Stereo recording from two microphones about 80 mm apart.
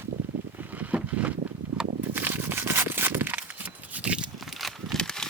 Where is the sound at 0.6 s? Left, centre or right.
Right.